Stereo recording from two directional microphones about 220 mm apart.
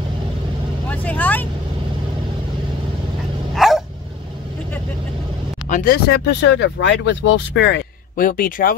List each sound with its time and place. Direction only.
0.8 s speech: 5° left (ahead or behind)
3.5 s dog: centre (ahead or behind)
5.7 s speech: 45° left (ahead or behind)